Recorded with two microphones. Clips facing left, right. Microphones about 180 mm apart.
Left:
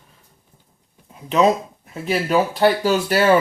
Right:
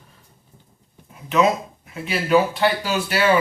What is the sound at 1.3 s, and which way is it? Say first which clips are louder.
Speech: left 2 dB; 35° left (ahead or behind).